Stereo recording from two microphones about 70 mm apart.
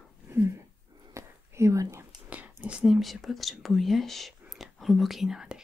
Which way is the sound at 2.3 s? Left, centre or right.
Right.